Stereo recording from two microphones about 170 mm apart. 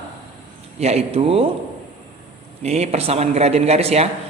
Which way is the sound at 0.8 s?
40° right (ahead or behind).